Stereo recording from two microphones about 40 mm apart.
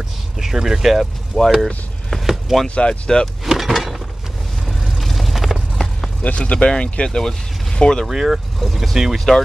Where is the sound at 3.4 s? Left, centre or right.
Centre.